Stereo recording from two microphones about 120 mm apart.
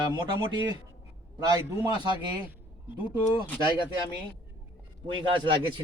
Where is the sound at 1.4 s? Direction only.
35° right (ahead or behind).